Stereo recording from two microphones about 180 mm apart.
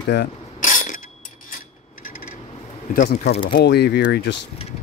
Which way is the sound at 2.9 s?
50° left (ahead or behind).